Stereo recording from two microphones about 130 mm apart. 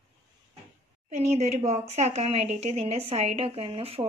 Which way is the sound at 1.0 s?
60° right (ahead or behind).